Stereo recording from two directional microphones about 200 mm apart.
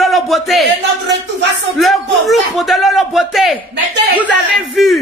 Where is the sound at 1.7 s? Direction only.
Centre (ahead or behind).